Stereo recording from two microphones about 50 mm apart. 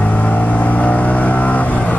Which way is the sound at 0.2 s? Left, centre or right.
Left.